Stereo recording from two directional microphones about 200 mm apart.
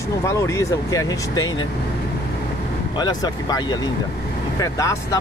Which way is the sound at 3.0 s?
20° left (ahead or behind).